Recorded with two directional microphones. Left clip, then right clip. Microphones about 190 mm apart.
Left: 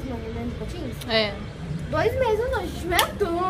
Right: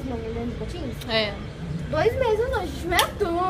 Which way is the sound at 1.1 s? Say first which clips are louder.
Left 1 dB; 20° left (ahead or behind).